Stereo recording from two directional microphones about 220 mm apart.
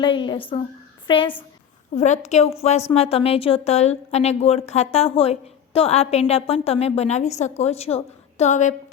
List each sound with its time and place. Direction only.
0.0 s a woman's voice: 20° left (ahead or behind)